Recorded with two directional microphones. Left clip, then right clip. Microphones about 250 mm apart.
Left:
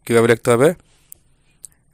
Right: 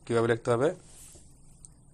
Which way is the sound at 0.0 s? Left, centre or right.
Left.